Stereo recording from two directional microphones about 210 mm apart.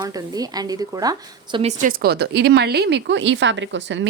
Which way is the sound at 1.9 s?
45° right (ahead or behind).